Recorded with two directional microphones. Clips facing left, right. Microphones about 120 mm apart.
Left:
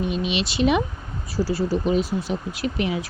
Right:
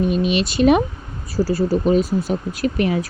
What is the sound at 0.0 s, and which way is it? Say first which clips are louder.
Speech: right 6 dB; 45° right (ahead or behind).